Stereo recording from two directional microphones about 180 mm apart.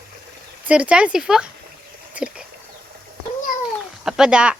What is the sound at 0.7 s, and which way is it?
Speech, 5° right (ahead or behind).